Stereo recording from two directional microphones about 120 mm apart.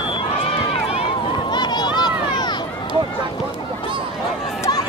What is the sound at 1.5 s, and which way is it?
Run, 35° left (ahead or behind).